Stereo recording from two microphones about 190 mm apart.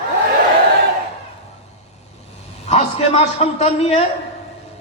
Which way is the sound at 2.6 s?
35° left (ahead or behind).